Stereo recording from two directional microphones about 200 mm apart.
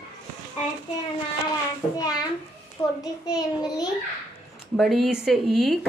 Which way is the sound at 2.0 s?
20° left (ahead or behind).